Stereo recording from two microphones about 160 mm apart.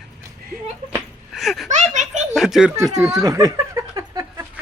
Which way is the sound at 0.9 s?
Centre (ahead or behind).